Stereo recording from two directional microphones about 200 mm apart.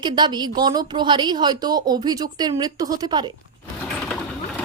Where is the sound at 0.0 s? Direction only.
20° right (ahead or behind).